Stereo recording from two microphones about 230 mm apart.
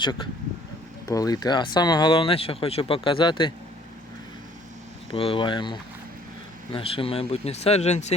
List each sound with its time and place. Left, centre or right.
0.0 s speech: centre
5.1 s speech: left